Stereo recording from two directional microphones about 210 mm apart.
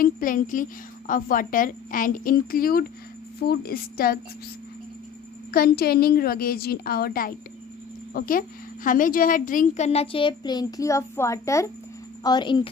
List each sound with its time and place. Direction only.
0.0 s a woman's voice: 40° left (ahead or behind)
5.5 s a woman's voice: 45° left (ahead or behind); by 12.6 s 20° left (ahead or behind)